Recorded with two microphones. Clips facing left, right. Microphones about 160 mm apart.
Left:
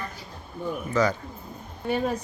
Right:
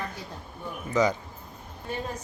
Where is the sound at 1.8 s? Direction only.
70° left (ahead or behind).